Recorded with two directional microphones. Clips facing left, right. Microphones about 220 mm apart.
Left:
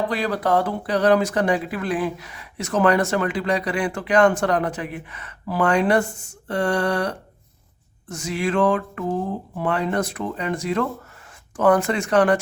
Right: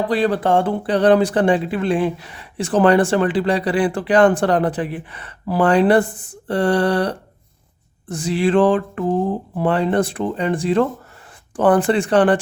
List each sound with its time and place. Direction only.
0.1 s speech: 30° right (ahead or behind)